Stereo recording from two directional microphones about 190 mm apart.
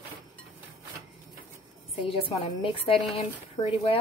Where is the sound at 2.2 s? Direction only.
30° left (ahead or behind).